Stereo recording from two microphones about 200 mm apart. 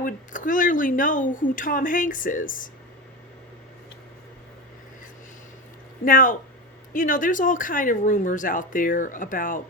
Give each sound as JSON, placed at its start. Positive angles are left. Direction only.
{"t": 0.0, "sound": "speech", "side_deg": 40}
{"t": 6.1, "sound": "speech", "side_deg": 45}